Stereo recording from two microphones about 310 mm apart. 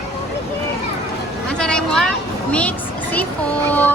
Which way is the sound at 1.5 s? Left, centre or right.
Centre.